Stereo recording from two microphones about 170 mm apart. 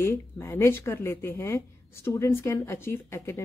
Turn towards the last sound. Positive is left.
turn(degrees=15)  # may be behind; listen again after turning